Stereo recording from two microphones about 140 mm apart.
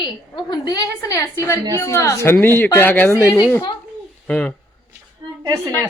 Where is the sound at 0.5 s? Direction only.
30° left (ahead or behind); by 4.5 s 10° left (ahead or behind).